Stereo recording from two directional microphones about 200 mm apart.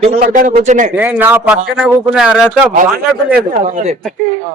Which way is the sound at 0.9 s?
10° right (ahead or behind).